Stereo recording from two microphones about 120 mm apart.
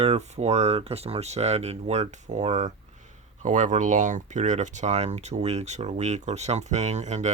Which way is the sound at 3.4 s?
90° right.